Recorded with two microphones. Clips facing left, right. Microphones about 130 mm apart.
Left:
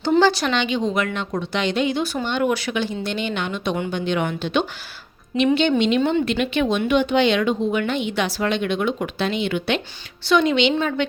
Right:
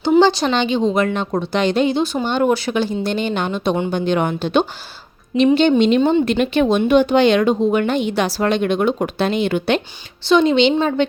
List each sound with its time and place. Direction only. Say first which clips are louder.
0.2 s speech: right 4 dB; 25° right (ahead or behind)
0.5 s speech: right 4 dB; 35° right (ahead or behind)
10.2 s speech: right 4 dB; 25° right (ahead or behind)